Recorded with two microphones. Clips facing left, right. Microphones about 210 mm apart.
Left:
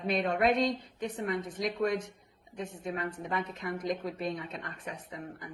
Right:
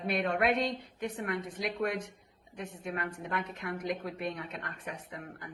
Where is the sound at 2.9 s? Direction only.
65° right (ahead or behind).